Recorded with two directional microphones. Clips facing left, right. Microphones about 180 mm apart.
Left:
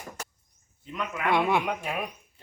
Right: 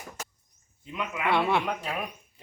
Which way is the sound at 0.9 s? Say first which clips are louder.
Even; 5° right (ahead or behind).